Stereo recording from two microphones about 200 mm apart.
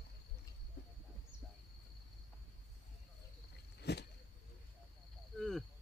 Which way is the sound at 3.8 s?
55° left (ahead or behind).